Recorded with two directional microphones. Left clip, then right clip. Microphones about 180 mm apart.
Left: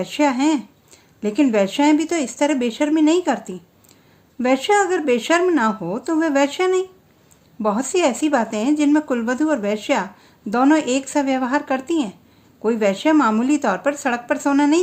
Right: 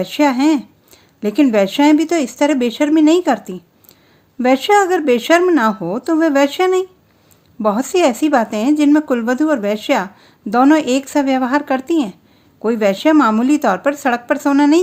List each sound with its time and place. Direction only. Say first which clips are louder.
0.0 s speech: right 4 dB; 30° right (ahead or behind)